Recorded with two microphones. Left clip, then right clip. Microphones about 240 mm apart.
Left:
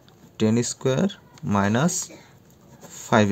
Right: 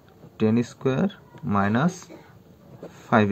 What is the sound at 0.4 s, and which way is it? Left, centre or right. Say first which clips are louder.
Speech: left 1 dB; left.